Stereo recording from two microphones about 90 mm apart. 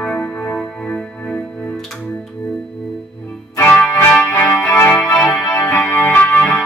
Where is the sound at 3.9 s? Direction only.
25° left (ahead or behind).